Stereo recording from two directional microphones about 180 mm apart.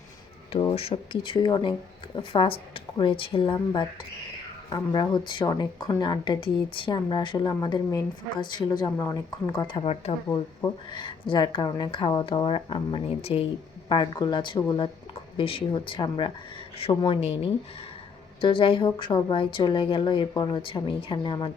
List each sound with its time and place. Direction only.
0.6 s a woman's voice: 30° left (ahead or behind)